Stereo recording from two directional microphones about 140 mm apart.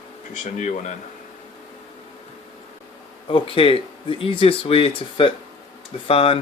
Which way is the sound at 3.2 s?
40° left (ahead or behind).